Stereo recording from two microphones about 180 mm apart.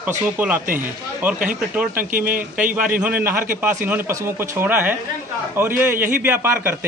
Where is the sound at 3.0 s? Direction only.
10° right (ahead or behind).